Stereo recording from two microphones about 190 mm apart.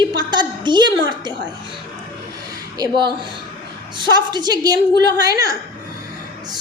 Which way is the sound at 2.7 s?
20° right (ahead or behind).